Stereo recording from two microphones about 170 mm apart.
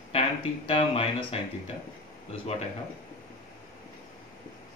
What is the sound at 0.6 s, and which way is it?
Speech, 35° left (ahead or behind).